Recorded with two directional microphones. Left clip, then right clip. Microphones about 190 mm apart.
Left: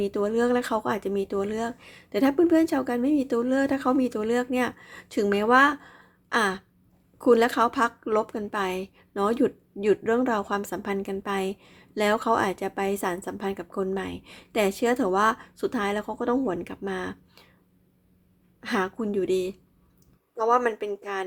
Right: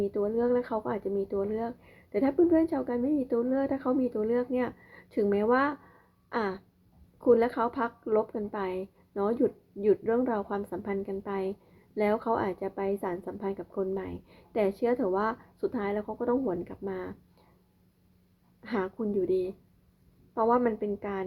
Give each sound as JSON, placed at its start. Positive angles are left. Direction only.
{"t": 0.0, "sound": "speech", "side_deg": 20}
{"t": 18.6, "sound": "speech", "side_deg": 15}